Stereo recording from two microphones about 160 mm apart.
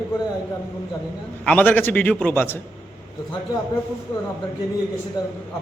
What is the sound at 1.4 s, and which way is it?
A man's voice, 10° left (ahead or behind).